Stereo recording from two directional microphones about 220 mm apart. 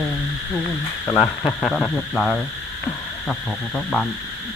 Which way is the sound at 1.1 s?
15° left (ahead or behind).